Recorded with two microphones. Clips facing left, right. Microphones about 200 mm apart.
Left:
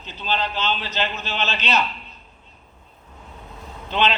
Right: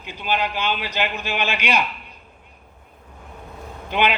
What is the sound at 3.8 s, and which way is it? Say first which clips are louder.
Speech: right 1 dB; 10° right (ahead or behind).